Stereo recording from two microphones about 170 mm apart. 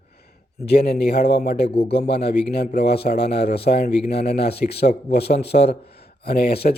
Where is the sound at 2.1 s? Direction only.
70° left (ahead or behind).